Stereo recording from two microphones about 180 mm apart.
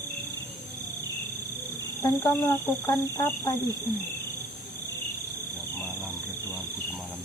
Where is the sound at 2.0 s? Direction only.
15° left (ahead or behind).